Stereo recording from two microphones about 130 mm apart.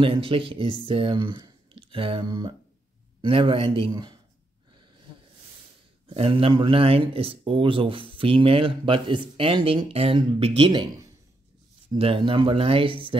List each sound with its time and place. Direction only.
0.0 s speech: 45° right (ahead or behind)
6.0 s speech: 45° right (ahead or behind)
11.9 s speech: 45° right (ahead or behind)